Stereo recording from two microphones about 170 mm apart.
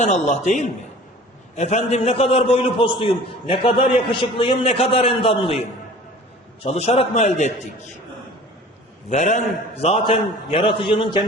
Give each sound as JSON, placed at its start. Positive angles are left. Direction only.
{"t": 0.0, "sound": "a man's voice", "side_deg": 45}
{"t": 6.6, "sound": "a man's voice", "side_deg": 35}
{"t": 9.0, "sound": "a man's voice", "side_deg": 45}
{"t": 9.8, "sound": "a man's voice", "side_deg": 30}